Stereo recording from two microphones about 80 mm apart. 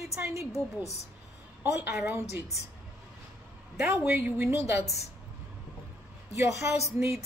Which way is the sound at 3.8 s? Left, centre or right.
Right.